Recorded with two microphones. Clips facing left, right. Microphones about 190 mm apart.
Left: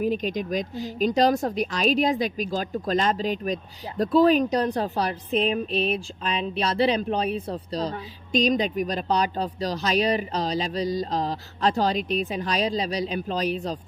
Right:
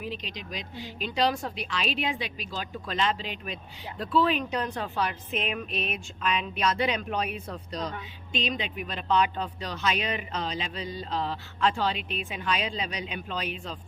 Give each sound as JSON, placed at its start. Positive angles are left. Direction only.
{"t": 0.0, "sound": "speech", "side_deg": 45}